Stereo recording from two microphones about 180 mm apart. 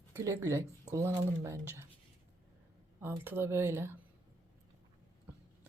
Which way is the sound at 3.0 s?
15° right (ahead or behind).